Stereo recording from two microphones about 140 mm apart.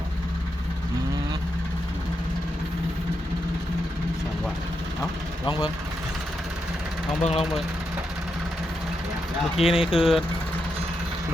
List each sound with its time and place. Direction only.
7.2 s speech: 50° left (ahead or behind)
9.6 s speech: 5° right (ahead or behind)